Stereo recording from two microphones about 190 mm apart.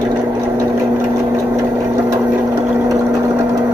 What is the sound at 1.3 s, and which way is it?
Sewing machine, 15° right (ahead or behind).